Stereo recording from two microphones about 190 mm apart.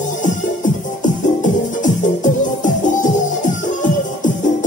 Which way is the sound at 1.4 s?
40° left (ahead or behind).